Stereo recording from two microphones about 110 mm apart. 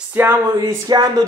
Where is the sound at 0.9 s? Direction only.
40° right (ahead or behind).